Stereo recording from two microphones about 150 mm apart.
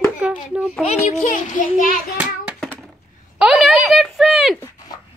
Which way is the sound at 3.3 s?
5° right (ahead or behind).